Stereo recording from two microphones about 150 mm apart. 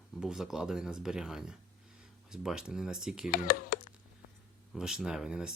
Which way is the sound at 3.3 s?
70° left (ahead or behind).